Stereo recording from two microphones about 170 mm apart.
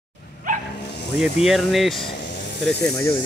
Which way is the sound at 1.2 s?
5° right (ahead or behind).